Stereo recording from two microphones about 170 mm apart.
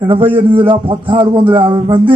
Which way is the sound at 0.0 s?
30° right (ahead or behind).